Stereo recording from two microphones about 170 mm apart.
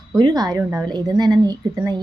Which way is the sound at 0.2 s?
25° right (ahead or behind).